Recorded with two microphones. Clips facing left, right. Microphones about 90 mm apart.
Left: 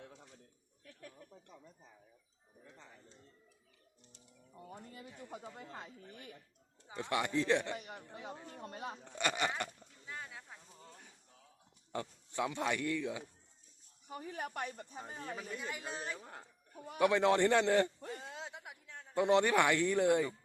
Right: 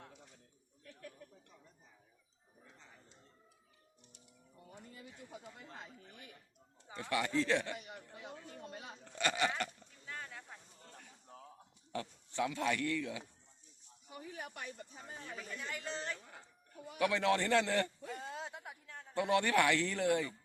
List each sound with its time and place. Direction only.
5.3 s speech: 50° left (ahead or behind)
6.8 s speech: 20° left (ahead or behind)
7.8 s speech: 50° left (ahead or behind)
9.0 s speech: 20° left (ahead or behind)
10.1 s a sound: 10° left (ahead or behind)
11.3 s a sound: 55° right (ahead or behind)
12.4 s speech: 20° left (ahead or behind)
14.1 s speech: 45° left (ahead or behind)
15.4 s speech: 25° left (ahead or behind)
15.7 s speech: 15° left (ahead or behind)
16.2 s speech: 45° left (ahead or behind)
17.0 s speech: 20° left (ahead or behind)
18.1 s a sound: centre (ahead or behind)
19.1 s speech: 20° left (ahead or behind)